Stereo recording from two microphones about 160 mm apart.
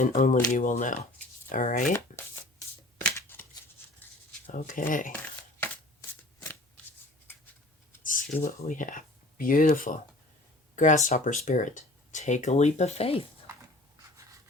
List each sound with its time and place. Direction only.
0.0 s speech: 55° left (ahead or behind)
1.9 s shuffling cards: 15° left (ahead or behind)
3.2 s a sound: 15° left (ahead or behind)
4.5 s speech: 55° left (ahead or behind)
8.0 s speech: 60° left (ahead or behind); by 13.2 s 40° left (ahead or behind)